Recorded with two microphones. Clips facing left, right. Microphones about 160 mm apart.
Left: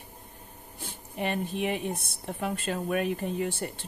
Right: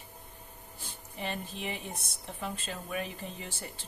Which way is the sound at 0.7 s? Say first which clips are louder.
Left 8 dB; 55° left (ahead or behind).